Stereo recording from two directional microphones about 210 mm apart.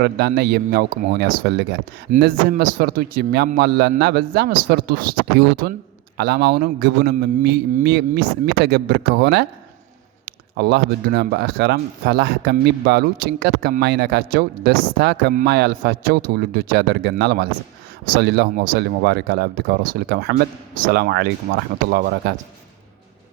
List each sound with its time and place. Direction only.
0.0 s speech: 50° right (ahead or behind)